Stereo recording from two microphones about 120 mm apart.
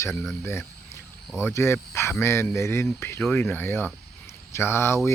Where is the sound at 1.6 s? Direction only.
20° left (ahead or behind).